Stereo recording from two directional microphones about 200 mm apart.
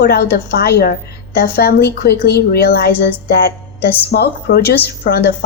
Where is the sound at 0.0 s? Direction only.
50° left (ahead or behind).